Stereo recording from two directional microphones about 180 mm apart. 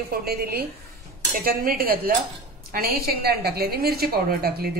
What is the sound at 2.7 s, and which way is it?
A woman's voice, 55° right (ahead or behind).